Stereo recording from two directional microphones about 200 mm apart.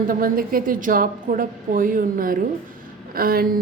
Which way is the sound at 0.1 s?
45° right (ahead or behind).